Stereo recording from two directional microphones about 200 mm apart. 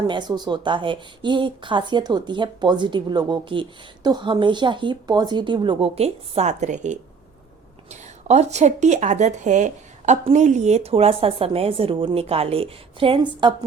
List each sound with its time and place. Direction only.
0.1 s a woman's voice: 20° right (ahead or behind)